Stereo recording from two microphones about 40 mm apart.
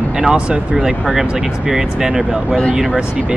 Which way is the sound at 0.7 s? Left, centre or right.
Centre.